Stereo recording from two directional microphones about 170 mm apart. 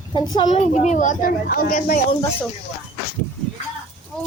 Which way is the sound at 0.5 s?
40° left (ahead or behind).